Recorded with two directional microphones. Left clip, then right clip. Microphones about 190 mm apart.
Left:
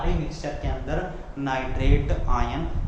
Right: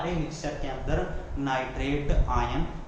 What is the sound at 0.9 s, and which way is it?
A man's voice, 20° left (ahead or behind).